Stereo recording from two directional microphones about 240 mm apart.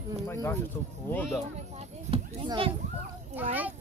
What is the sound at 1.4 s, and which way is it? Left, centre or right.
A child's voice, right.